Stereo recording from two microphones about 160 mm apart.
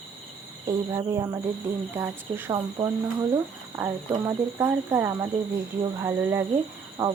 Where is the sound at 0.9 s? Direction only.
20° right (ahead or behind).